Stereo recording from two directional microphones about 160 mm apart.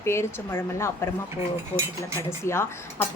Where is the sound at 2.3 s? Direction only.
15° left (ahead or behind).